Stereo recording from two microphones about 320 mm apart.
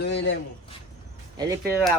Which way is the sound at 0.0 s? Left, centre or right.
Left.